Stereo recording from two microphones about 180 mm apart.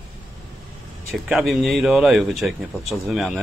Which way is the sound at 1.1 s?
Centre (ahead or behind).